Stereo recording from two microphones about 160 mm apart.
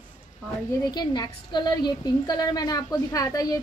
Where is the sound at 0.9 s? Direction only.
25° left (ahead or behind).